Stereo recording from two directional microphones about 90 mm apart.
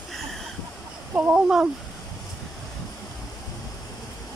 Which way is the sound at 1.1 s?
15° right (ahead or behind).